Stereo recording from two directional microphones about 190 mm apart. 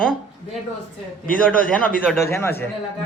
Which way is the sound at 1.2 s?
45° left (ahead or behind).